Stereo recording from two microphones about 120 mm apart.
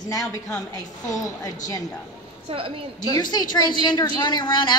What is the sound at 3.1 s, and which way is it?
A woman's voice, 35° left (ahead or behind).